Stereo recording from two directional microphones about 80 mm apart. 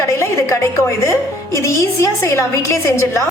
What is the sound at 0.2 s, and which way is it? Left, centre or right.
A woman's voice, left.